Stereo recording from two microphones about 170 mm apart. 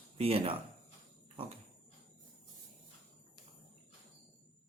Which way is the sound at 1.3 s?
35° right (ahead or behind).